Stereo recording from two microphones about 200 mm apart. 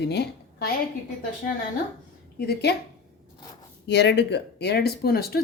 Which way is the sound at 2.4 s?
55° left (ahead or behind).